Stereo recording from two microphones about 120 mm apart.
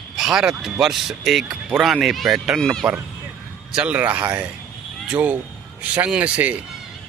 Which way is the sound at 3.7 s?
10° right (ahead or behind).